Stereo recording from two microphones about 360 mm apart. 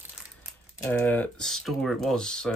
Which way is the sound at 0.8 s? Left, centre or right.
Centre.